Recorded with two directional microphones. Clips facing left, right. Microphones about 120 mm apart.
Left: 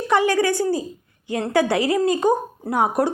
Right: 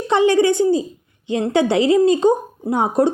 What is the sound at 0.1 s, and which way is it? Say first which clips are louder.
A woman's voice: right 4 dB; 25° right (ahead or behind).